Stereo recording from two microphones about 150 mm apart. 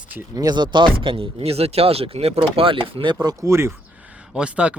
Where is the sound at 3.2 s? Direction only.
20° right (ahead or behind).